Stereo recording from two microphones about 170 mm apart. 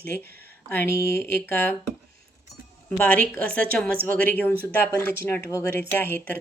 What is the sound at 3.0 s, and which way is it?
Speech, 10° left (ahead or behind).